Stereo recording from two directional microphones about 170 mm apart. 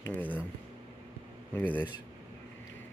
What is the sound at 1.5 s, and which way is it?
Speech, 10° left (ahead or behind).